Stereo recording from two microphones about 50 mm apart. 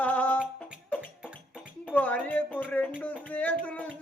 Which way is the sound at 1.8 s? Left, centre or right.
Left.